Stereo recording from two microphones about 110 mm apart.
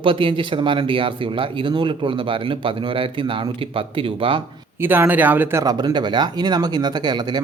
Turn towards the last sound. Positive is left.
turn(degrees=-40)  # may be behind; listen again after turning